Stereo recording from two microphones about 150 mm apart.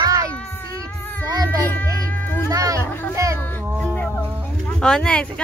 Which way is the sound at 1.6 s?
10° left (ahead or behind).